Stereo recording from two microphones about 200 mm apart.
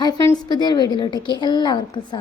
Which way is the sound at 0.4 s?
20° left (ahead or behind).